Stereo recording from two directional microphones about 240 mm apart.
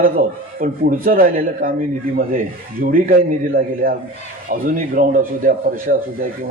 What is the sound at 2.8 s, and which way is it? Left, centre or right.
Speech, right.